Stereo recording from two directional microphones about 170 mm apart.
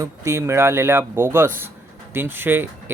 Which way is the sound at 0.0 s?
15° right (ahead or behind).